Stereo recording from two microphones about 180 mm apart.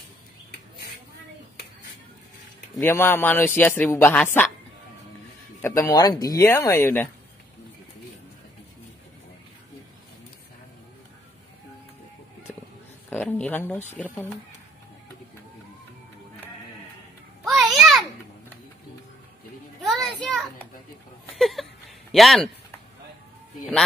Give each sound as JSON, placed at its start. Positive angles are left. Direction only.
{"t": 2.8, "sound": "speech", "side_deg": 15}
{"t": 5.6, "sound": "a man's voice", "side_deg": 10}
{"t": 13.1, "sound": "speech", "side_deg": 10}
{"t": 17.5, "sound": "a sound", "side_deg": 0}
{"t": 19.8, "sound": "children playing", "side_deg": 0}
{"t": 21.4, "sound": "a sound", "side_deg": 0}
{"t": 22.1, "sound": "speech", "side_deg": 0}